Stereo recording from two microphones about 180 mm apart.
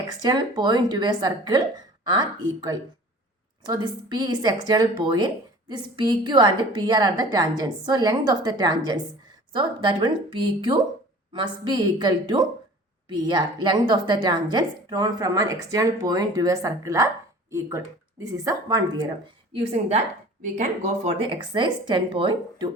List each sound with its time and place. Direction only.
0.2 s a woman's voice: 25° right (ahead or behind)
19.5 s a woman's voice: 35° right (ahead or behind)